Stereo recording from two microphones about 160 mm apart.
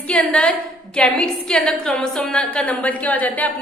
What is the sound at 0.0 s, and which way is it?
A woman's voice, 5° left (ahead or behind).